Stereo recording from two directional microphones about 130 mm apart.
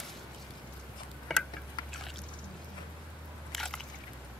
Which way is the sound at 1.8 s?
35° left (ahead or behind).